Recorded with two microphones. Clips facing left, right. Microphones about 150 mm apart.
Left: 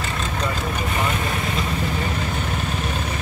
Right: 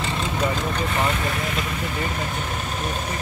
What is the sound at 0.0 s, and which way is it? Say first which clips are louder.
Vehicle: right 2 dB; 10° right (ahead or behind).